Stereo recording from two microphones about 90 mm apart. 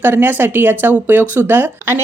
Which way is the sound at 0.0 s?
25° right (ahead or behind).